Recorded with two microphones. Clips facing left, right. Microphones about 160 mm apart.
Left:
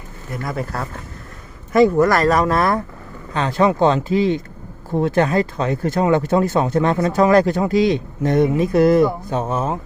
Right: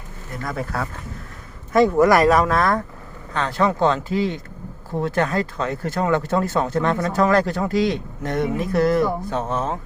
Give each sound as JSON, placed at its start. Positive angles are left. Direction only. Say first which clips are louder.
{"t": 0.4, "sound": "speech", "louder": "left 1 dB", "side_deg": 0}
{"t": 2.0, "sound": "speech", "louder": "right 1 dB", "side_deg": -10}
{"t": 2.3, "sound": "speech", "louder": "left 1 dB", "side_deg": 0}
{"t": 3.3, "sound": "speech", "louder": "left 4 dB", "side_deg": 15}